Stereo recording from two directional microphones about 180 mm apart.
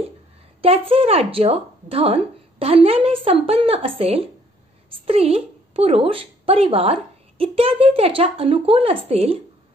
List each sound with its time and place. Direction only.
0.6 s a woman's voice: 30° right (ahead or behind)